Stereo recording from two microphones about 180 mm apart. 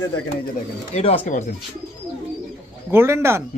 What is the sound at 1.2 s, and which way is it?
Speech, 45° left (ahead or behind).